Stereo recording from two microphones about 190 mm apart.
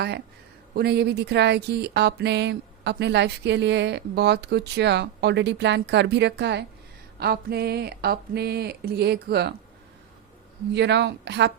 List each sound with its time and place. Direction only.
0.7 s speech: 60° right (ahead or behind)
10.7 s speech: 65° right (ahead or behind)